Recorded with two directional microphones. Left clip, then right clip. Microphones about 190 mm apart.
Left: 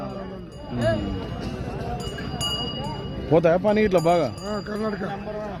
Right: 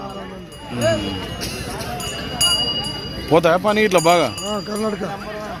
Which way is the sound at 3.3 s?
10° left (ahead or behind).